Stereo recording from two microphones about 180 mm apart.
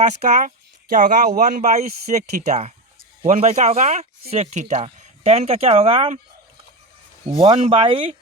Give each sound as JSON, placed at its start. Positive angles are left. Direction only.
{"t": 0.0, "sound": "speech", "side_deg": -45}
{"t": 7.3, "sound": "speech", "side_deg": -30}